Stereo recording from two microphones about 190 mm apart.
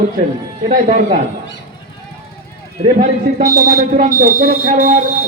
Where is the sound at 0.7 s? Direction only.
40° right (ahead or behind).